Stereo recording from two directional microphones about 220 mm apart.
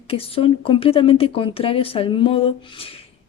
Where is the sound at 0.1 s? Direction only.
25° left (ahead or behind).